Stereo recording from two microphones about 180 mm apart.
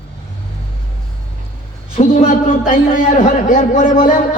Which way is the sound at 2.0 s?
45° left (ahead or behind).